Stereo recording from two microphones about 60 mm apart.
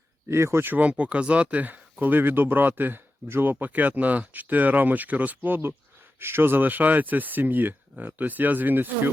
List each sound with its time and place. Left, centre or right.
0.3 s speech: right
0.6 s speech: right
0.9 s speech: right